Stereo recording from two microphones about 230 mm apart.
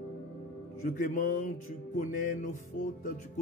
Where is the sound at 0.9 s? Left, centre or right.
Left.